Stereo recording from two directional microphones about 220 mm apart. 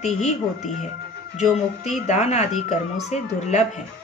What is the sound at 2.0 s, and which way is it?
Speech, 30° left (ahead or behind).